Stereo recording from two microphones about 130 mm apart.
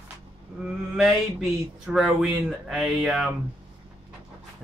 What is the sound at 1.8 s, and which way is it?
Speech, centre (ahead or behind).